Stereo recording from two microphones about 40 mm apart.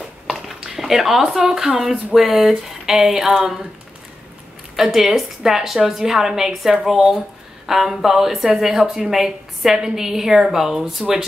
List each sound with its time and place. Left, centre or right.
0.3 s speech: centre
4.7 s speech: centre